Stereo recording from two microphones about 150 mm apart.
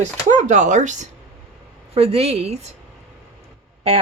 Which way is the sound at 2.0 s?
40° right (ahead or behind).